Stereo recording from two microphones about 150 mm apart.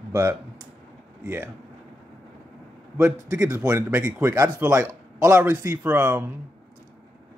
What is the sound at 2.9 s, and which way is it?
A man's voice, 20° right (ahead or behind).